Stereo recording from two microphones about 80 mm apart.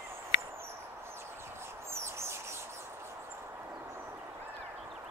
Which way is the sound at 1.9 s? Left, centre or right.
Right.